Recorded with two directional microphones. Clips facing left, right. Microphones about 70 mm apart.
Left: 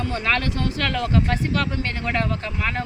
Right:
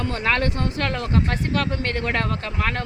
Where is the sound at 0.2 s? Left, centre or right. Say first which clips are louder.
Right 2 dB; right.